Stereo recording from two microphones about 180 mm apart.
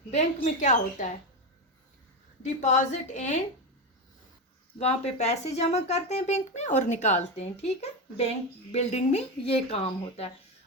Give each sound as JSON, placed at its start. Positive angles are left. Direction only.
{"t": 0.4, "sound": "speech", "side_deg": 40}
{"t": 2.4, "sound": "a child's voice", "side_deg": 40}
{"t": 4.8, "sound": "a child's voice", "side_deg": 35}